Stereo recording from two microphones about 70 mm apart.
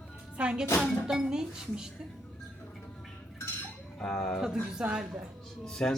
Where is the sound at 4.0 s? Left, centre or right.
Centre.